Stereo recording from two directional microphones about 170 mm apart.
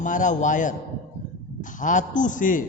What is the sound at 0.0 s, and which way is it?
Speech, 50° left (ahead or behind).